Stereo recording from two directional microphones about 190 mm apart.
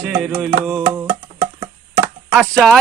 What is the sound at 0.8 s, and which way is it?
Music, 20° right (ahead or behind).